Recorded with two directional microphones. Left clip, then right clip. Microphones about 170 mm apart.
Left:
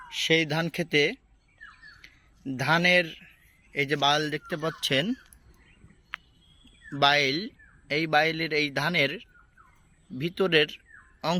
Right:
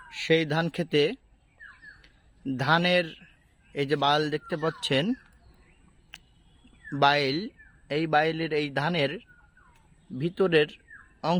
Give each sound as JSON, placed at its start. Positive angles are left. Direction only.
{"t": 0.1, "sound": "speech", "side_deg": -30}
{"t": 7.0, "sound": "speech", "side_deg": -30}